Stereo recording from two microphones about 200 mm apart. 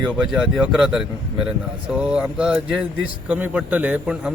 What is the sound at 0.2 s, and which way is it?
A man's voice, centre (ahead or behind).